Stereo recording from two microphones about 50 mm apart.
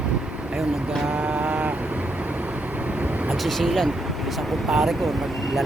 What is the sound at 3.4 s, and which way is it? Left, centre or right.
Speech, centre.